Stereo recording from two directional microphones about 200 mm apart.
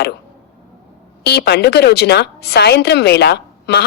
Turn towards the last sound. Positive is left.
turn(degrees=55)  # may be behind; listen again after turning